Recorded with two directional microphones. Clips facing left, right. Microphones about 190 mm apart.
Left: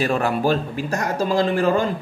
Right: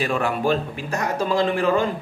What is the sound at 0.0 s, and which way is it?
A man's voice, 40° left (ahead or behind).